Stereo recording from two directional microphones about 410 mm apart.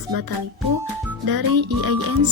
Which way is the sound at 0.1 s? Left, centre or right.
Right.